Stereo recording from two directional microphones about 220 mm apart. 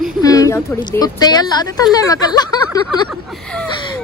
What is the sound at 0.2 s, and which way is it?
A woman's voice, 15° left (ahead or behind).